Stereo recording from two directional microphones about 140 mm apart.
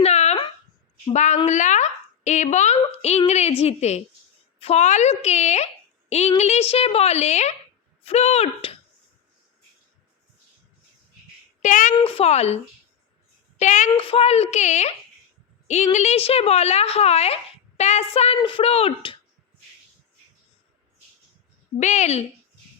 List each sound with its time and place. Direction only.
0.0 s a sound: 50° left (ahead or behind)
1.1 s a woman's voice: 55° left (ahead or behind)
11.6 s speech: 70° left (ahead or behind)
12.0 s a woman's voice: 45° left (ahead or behind)
13.6 s a woman's voice: 60° left (ahead or behind)
14.1 s a woman's voice: 45° left (ahead or behind)
18.3 s speech: 35° left (ahead or behind)
21.8 s a woman's voice: 55° left (ahead or behind)